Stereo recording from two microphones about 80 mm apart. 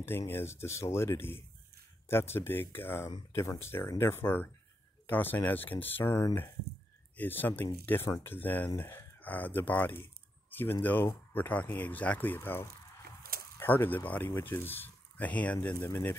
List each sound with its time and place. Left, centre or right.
0.3 s speech: left
8.7 s speech: left
9.2 s speech: left